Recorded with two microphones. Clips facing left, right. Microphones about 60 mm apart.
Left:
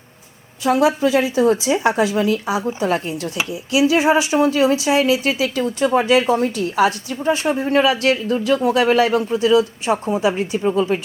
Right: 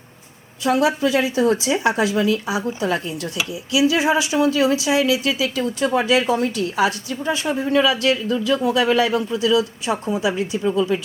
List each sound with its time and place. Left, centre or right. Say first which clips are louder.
0.6 s speech: left 2 dB; left